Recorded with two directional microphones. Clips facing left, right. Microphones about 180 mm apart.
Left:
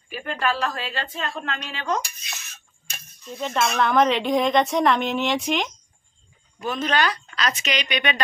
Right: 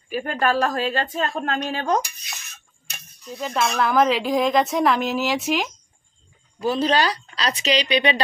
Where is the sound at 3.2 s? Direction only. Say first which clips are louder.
Even; centre (ahead or behind).